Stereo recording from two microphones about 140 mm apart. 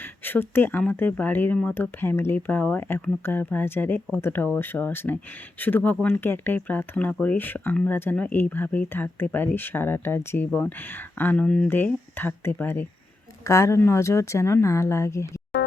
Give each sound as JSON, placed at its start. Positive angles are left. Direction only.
{"t": 0.3, "sound": "speech", "side_deg": 15}